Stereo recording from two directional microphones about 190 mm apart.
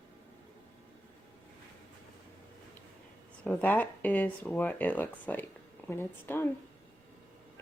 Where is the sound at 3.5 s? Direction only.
10° left (ahead or behind).